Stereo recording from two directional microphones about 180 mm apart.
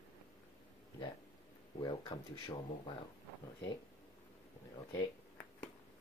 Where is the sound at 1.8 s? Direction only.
25° left (ahead or behind).